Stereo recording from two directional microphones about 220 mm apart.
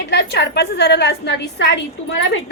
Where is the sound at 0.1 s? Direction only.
50° left (ahead or behind).